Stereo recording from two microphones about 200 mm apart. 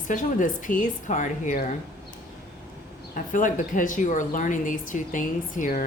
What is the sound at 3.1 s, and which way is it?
Speech, 40° left (ahead or behind).